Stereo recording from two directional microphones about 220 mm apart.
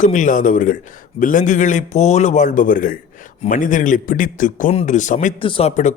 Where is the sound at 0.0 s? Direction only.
35° left (ahead or behind).